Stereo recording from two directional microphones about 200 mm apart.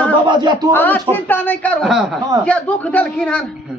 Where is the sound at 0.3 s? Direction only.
20° right (ahead or behind).